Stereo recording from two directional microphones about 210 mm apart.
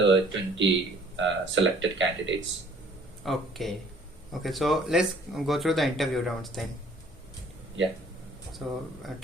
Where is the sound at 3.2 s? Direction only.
Centre (ahead or behind).